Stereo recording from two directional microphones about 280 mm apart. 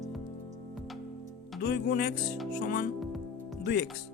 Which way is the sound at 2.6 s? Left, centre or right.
Left.